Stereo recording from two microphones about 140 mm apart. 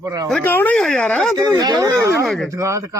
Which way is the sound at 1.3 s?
25° right (ahead or behind).